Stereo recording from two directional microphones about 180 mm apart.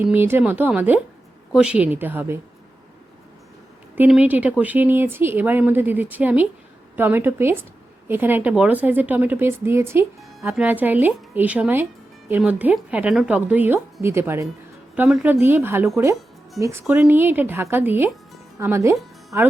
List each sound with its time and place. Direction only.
0.0 s speech: 10° right (ahead or behind)
3.9 s speech: 10° right (ahead or behind)
16.6 s speech: centre (ahead or behind)
16.9 s speech: 10° right (ahead or behind)